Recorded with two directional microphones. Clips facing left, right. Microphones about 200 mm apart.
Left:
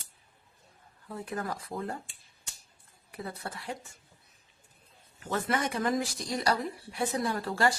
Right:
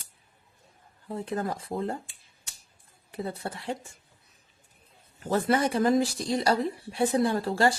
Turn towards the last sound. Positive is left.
turn(degrees=-30)  # may be behind; listen again after turning